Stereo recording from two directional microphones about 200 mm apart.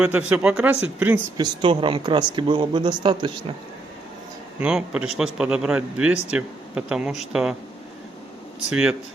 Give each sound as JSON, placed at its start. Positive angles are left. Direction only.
{"t": 0.0, "sound": "speech", "side_deg": -5}
{"t": 1.6, "sound": "speech", "side_deg": -25}
{"t": 4.6, "sound": "speech", "side_deg": -5}
{"t": 8.7, "sound": "speech", "side_deg": -5}